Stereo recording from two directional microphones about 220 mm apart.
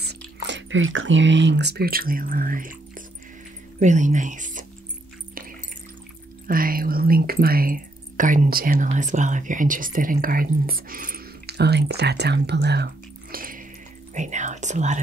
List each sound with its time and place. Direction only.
0.0 s speech: 50° right (ahead or behind); by 4.6 s 35° right (ahead or behind)
6.4 s speech: 40° right (ahead or behind)